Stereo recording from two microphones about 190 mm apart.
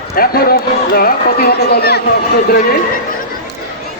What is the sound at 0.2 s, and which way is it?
Speech, 50° left (ahead or behind).